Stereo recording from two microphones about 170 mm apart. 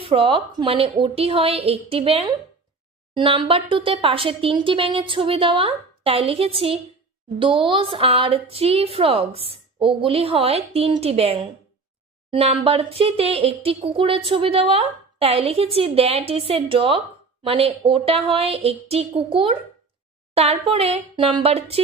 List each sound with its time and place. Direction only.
0.0 s speech: 35° right (ahead or behind)